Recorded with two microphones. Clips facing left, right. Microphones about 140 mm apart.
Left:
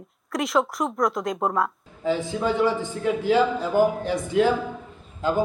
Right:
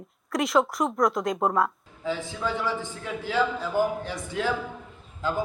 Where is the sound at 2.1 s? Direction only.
20° left (ahead or behind).